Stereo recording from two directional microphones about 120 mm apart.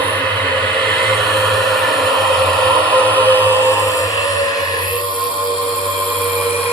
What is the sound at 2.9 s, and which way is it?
Music, 15° left (ahead or behind).